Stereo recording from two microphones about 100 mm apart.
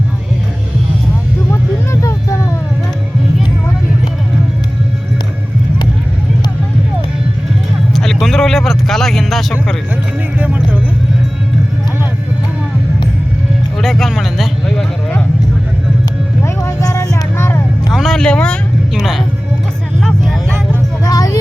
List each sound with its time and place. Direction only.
1.9 s vehicle: 30° left (ahead or behind)
7.9 s a sound: centre (ahead or behind)
13.8 s a sound: centre (ahead or behind)
16.4 s vehicle: 30° left (ahead or behind)
17.9 s music: centre (ahead or behind)
18.9 s music: centre (ahead or behind)
20.0 s vehicle: 5° left (ahead or behind)
21.0 s music: 40° left (ahead or behind)